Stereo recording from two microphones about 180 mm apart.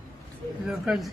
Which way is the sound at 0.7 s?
Centre (ahead or behind).